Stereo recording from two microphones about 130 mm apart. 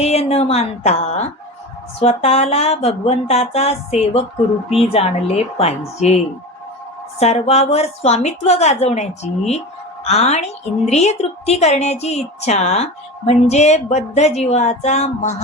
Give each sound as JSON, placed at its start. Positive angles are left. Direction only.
{"t": 0.0, "sound": "speech", "side_deg": 55}
{"t": 7.2, "sound": "a woman's voice", "side_deg": 55}